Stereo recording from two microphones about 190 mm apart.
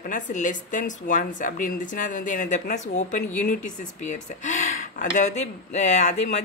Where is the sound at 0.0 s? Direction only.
40° left (ahead or behind).